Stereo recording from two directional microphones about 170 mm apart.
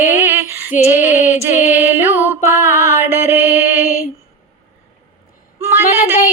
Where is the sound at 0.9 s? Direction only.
15° right (ahead or behind).